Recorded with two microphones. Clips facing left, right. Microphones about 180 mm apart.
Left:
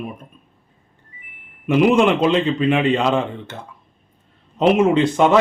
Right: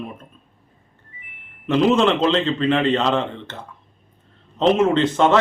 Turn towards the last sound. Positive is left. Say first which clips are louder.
# left 2 dB
turn(degrees=10)  # may be behind; listen again after turning